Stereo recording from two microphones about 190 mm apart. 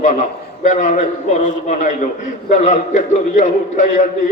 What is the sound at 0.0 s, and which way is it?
A man's voice, 40° left (ahead or behind).